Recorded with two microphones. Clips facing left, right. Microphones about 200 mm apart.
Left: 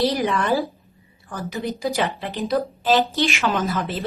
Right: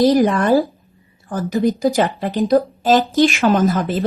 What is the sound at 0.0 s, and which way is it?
Speech, 45° right (ahead or behind).